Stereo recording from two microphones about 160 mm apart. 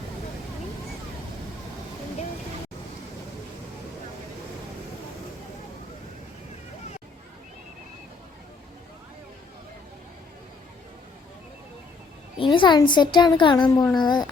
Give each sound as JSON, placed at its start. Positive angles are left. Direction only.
{"t": 12.4, "sound": "a woman's voice", "side_deg": 30}